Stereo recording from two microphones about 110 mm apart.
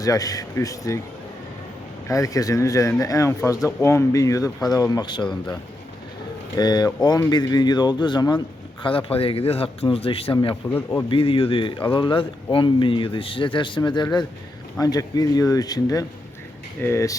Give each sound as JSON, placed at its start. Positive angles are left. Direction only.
{"t": 0.0, "sound": "a man's voice", "side_deg": 35}
{"t": 2.0, "sound": "a man's voice", "side_deg": 30}
{"t": 6.6, "sound": "a man's voice", "side_deg": 40}
{"t": 8.8, "sound": "speech", "side_deg": 55}
{"t": 10.5, "sound": "speech", "side_deg": 25}
{"t": 11.1, "sound": "a man's voice", "side_deg": 55}